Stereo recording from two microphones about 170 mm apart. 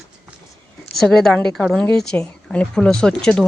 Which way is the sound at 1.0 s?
Centre (ahead or behind).